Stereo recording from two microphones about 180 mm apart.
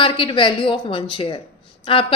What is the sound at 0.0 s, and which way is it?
A woman's voice, 30° left (ahead or behind).